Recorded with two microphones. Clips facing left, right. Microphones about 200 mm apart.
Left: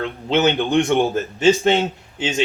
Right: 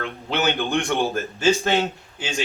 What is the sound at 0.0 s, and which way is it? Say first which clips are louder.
Speech: left 6 dB; 20° left (ahead or behind).